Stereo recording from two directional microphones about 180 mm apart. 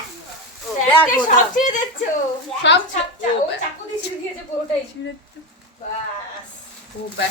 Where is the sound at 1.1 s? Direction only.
45° left (ahead or behind).